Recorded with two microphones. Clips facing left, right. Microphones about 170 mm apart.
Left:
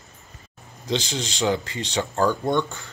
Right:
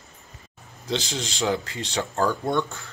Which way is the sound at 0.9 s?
Centre (ahead or behind).